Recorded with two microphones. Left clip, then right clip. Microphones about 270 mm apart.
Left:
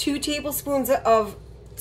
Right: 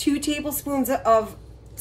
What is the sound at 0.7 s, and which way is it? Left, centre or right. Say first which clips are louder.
Speech: left 3 dB; centre.